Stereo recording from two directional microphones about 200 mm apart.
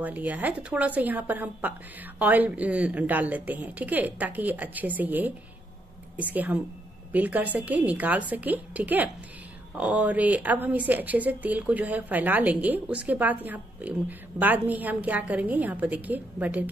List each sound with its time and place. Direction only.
0.0 s a woman's voice: 10° right (ahead or behind)